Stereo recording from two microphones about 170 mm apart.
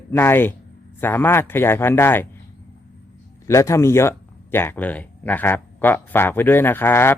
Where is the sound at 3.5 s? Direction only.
15° left (ahead or behind).